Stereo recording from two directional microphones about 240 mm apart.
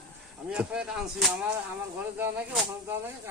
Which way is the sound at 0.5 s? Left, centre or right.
Centre.